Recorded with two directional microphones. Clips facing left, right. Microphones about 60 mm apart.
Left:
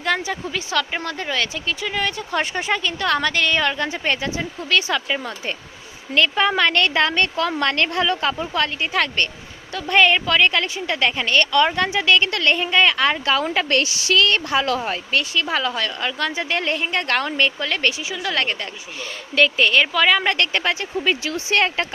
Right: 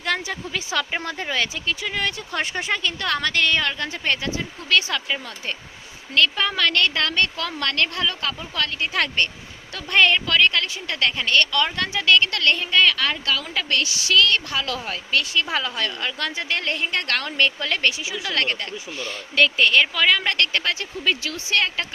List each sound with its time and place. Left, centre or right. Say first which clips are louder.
0.0 s a woman's voice: left 3 dB; centre
4.7 s a woman's voice: left 1 dB; centre; by 8.7 s left
8.8 s a woman's voice: left 2 dB; centre; by 13.4 s left
13.4 s a woman's voice: left 5 dB; left
15.2 s a woman's voice: left 2 dB; centre
20.1 s a woman's voice: left 3 dB; centre; by 21.8 s left